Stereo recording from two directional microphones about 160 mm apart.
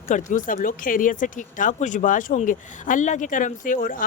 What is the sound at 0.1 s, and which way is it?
Speech, 50° left (ahead or behind).